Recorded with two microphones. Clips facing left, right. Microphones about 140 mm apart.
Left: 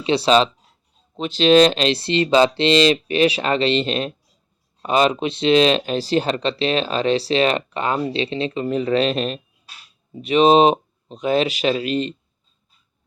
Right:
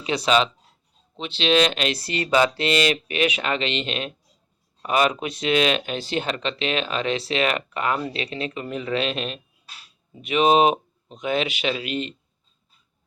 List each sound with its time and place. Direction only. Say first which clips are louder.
0.0 s speech: left 5 dB; 30° left (ahead or behind)